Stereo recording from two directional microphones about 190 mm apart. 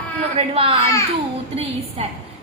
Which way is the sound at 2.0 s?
30° right (ahead or behind).